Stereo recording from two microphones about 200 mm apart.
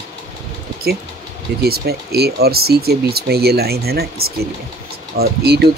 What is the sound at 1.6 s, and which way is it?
Speech, 50° right (ahead or behind).